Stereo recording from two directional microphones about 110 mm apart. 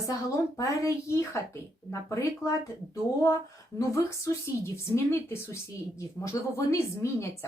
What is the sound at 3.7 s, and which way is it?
A woman's voice, 25° left (ahead or behind).